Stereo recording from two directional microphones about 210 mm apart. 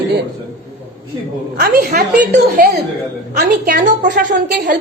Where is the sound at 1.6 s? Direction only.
40° right (ahead or behind).